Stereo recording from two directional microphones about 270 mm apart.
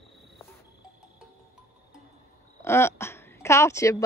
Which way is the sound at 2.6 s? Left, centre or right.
Centre.